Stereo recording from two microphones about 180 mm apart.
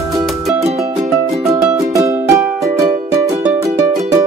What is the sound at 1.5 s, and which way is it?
Music, 15° right (ahead or behind).